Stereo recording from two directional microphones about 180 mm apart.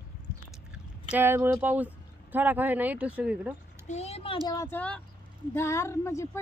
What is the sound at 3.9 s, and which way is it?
Speech, 35° left (ahead or behind).